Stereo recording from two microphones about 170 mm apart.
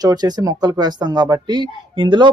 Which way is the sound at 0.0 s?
25° right (ahead or behind).